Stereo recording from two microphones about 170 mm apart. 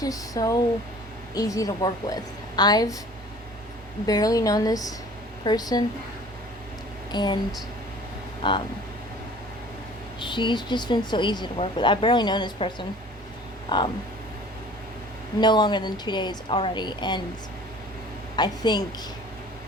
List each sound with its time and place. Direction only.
0.0 s speech: 20° left (ahead or behind)
4.0 s a woman's voice: 20° left (ahead or behind)
7.1 s speech: 25° left (ahead or behind)
8.4 s speech: 30° left (ahead or behind)
10.2 s speech: 30° left (ahead or behind)
15.4 s speech: 25° left (ahead or behind)
18.3 s speech: 25° left (ahead or behind)